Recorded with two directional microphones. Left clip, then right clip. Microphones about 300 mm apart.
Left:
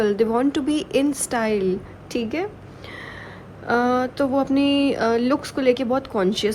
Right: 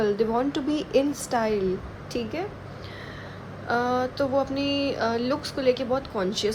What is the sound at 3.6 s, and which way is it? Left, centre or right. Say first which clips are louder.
Speech: left 5 dB; left.